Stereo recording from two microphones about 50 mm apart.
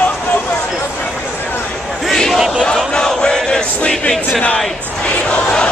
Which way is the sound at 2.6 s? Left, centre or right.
Centre.